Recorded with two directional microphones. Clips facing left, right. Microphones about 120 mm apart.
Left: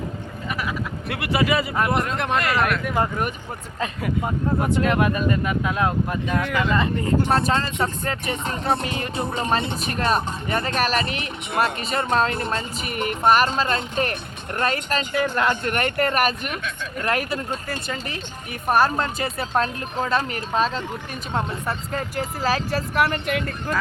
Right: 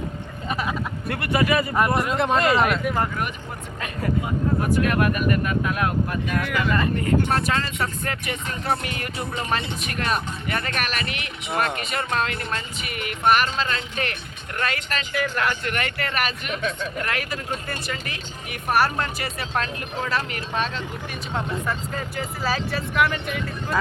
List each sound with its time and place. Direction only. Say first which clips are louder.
0.4 s speech: right 2 dB; 25° right (ahead or behind)
1.1 s speech: even; 10° left (ahead or behind)
2.0 s speech: right 2 dB; 15° right (ahead or behind)
2.4 s speech: right 3 dB; 25° right (ahead or behind)
4.6 s speech: left 2 dB; 20° left (ahead or behind)
15.1 s speech: left 3 dB; 25° left (ahead or behind)
15.7 s speech: left 5 dB; 45° left (ahead or behind)
17.1 s speech: left 5 dB; 35° left (ahead or behind)
18.7 s speech: left 2 dB; 20° left (ahead or behind)
21.9 s speech: left 3 dB; 45° left (ahead or behind)
23.3 s speech: left 3 dB; 60° left (ahead or behind)